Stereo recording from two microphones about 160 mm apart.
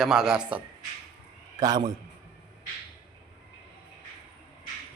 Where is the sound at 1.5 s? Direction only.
25° right (ahead or behind).